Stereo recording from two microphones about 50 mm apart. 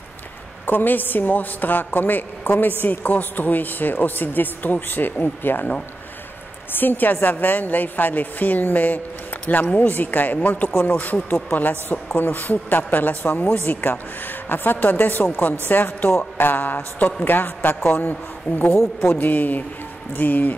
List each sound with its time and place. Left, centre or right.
0.7 s speech: left
6.7 s a man's voice: left